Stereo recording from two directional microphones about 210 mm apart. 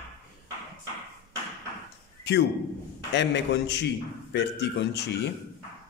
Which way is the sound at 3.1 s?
55° left (ahead or behind).